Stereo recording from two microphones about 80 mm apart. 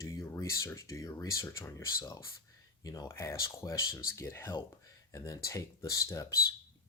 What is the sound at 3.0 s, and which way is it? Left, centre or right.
Speech, left.